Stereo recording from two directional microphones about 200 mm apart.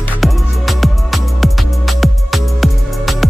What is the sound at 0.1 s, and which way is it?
Music, centre (ahead or behind).